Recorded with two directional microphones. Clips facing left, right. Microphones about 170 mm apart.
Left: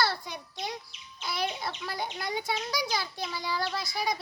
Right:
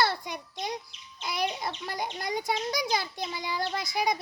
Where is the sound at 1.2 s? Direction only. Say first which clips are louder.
Right 2 dB; 15° right (ahead or behind).